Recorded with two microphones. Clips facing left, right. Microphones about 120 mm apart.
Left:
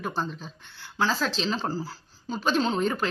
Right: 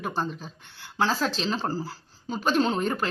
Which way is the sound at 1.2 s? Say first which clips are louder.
Right 1 dB; 5° right (ahead or behind).